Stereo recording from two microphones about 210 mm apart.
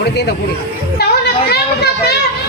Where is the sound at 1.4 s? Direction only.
50° left (ahead or behind).